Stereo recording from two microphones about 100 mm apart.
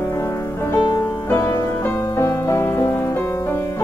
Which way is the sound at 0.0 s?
30° left (ahead or behind).